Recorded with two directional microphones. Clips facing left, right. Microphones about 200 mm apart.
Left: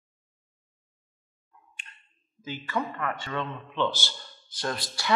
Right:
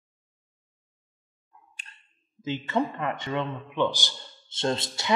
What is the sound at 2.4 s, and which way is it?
Speech, 25° right (ahead or behind).